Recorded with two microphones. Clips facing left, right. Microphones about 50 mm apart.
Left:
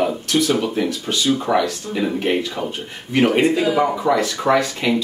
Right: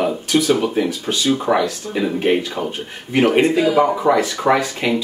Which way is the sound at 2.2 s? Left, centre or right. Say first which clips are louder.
Right 3 dB; centre.